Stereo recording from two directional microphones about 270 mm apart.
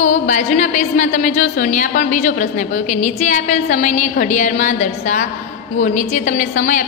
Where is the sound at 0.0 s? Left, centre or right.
Left.